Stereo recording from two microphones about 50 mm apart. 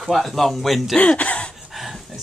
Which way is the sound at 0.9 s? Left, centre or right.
Left.